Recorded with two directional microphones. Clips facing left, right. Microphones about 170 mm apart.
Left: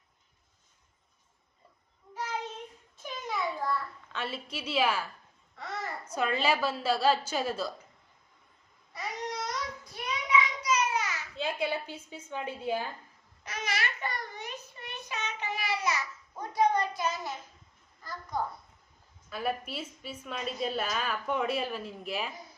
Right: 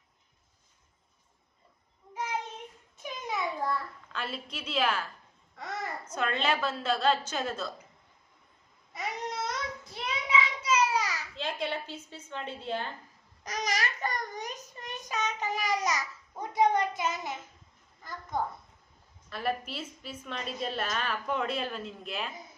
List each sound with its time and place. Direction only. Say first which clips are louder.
3.0 s a sound: even; 20° right (ahead or behind)
4.1 s a woman's voice: left 1 dB; 5° left (ahead or behind)
6.1 s a woman's voice: left 2 dB; 10° left (ahead or behind)
8.9 s child singing: right 1 dB; 25° right (ahead or behind)
11.3 s a woman's voice: left 3 dB; 10° left (ahead or behind)
13.4 s child singing: right 2 dB; 40° right (ahead or behind)
16.4 s a sound: right 1 dB; 20° right (ahead or behind)
19.3 s a woman's voice: even; 5° left (ahead or behind)